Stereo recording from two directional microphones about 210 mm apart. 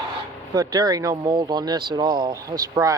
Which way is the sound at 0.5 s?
20° right (ahead or behind).